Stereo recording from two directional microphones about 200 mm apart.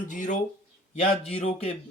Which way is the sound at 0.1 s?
40° left (ahead or behind).